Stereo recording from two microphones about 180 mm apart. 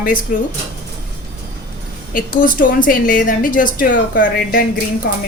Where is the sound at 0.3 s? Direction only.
50° left (ahead or behind).